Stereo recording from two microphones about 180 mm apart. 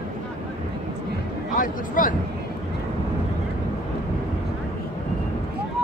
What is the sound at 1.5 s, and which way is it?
Speech, 50° left (ahead or behind).